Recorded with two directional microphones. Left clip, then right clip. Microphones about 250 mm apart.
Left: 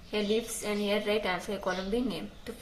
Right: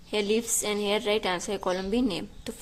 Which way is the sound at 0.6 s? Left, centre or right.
Right.